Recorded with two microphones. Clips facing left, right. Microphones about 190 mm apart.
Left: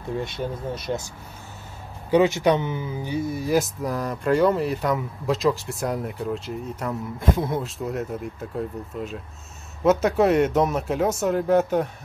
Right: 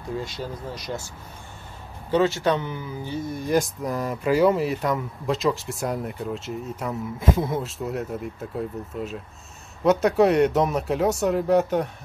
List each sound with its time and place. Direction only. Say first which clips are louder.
0.7 s speech: left 4 dB; 20° left (ahead or behind); by 11.9 s centre (ahead or behind)